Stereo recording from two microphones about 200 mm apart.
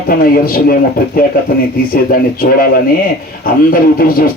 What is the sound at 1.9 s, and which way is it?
Speech, 45° left (ahead or behind).